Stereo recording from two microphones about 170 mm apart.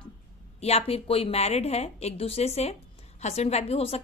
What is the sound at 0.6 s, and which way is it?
A woman's voice, 35° left (ahead or behind).